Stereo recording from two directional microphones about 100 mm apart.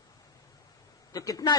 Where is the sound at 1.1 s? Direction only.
40° left (ahead or behind).